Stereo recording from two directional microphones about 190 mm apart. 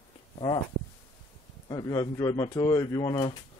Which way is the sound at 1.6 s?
20° left (ahead or behind).